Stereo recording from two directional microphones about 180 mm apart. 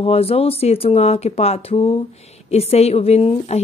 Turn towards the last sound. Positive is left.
turn(degrees=35)  # may be behind; listen again after turning